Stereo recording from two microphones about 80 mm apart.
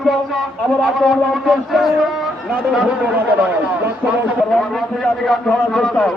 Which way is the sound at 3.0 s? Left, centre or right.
Centre.